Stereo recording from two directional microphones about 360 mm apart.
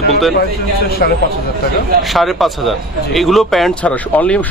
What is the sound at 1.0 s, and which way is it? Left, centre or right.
Speech, left.